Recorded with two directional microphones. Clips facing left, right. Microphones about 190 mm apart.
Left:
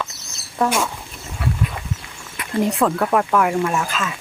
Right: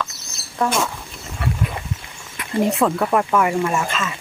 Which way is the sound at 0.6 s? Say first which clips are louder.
Left 1 dB; 5° left (ahead or behind).